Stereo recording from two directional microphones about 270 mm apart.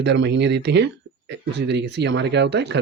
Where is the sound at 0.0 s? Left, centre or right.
Right.